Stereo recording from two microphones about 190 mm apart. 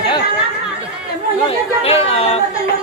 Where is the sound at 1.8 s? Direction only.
30° left (ahead or behind).